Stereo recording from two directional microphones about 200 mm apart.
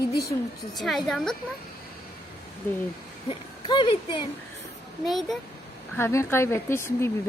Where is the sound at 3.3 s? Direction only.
25° left (ahead or behind).